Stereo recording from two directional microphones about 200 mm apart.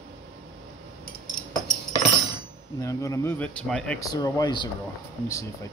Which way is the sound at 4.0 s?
20° left (ahead or behind).